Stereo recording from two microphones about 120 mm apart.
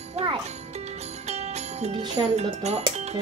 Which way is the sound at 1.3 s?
65° right (ahead or behind).